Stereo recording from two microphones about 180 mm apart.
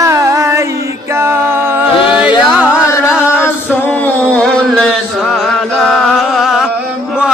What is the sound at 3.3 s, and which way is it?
Music, 10° left (ahead or behind).